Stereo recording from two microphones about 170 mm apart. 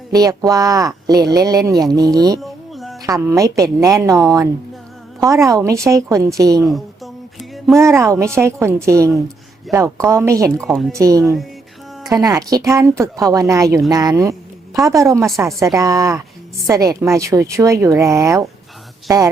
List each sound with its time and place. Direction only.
0.1 s speech: 20° right (ahead or behind)
2.4 s music: centre (ahead or behind)
3.0 s speech: 20° right (ahead or behind)
6.7 s a sound: centre (ahead or behind)
7.8 s a woman's voice: 15° right (ahead or behind)
10.6 s speech: centre (ahead or behind)
10.9 s speech: 20° right (ahead or behind)